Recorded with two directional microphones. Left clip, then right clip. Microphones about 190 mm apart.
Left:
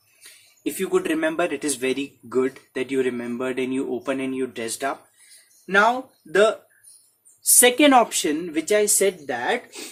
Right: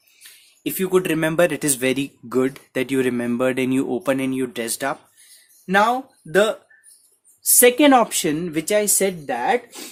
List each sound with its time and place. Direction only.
0.8 s speech: 55° right (ahead or behind)
7.6 s speech: 30° right (ahead or behind)